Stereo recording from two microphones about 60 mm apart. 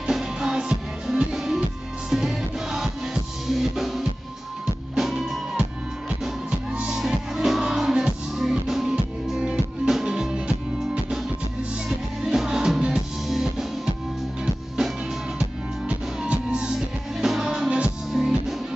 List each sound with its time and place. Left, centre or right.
0.0 s music: centre
6.7 s music: centre
12.2 s music: centre
13.3 s drum: centre
14.8 s music: centre
18.1 s music: centre